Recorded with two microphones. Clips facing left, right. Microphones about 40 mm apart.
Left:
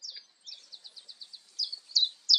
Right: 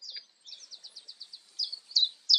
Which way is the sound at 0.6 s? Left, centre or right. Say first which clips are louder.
Even; left.